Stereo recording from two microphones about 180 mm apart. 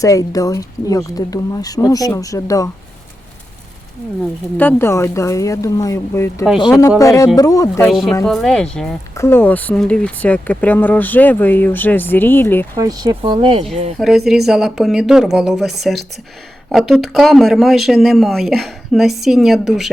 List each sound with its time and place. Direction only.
0.0 s speech: 20° left (ahead or behind)
4.5 s speech: 10° left (ahead or behind)
7.9 s speech: centre (ahead or behind)
9.1 s speech: 15° left (ahead or behind)
12.7 s speech: 20° right (ahead or behind)
14.3 s speech: centre (ahead or behind)